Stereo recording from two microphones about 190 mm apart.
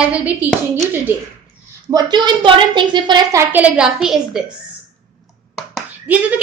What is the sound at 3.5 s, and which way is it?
Speech, 5° right (ahead or behind).